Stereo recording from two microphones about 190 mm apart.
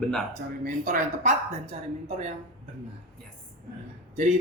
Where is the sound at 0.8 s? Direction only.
45° right (ahead or behind).